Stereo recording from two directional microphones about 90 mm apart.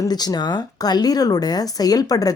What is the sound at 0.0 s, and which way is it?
Speech, 50° left (ahead or behind).